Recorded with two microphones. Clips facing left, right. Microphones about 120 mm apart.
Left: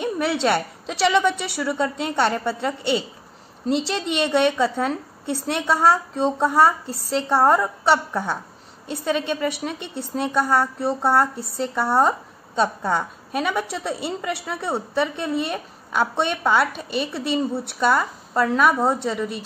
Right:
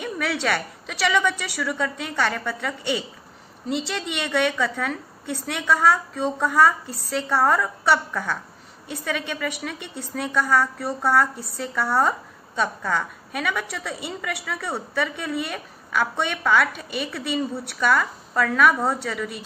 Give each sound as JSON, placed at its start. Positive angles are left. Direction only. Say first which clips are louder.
{"t": 0.0, "sound": "speech", "louder": "left 4 dB", "side_deg": 25}